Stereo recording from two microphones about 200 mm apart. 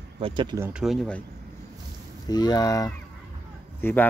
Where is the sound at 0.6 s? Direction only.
5° right (ahead or behind).